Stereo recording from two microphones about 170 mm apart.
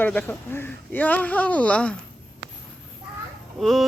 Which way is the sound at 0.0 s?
10° left (ahead or behind).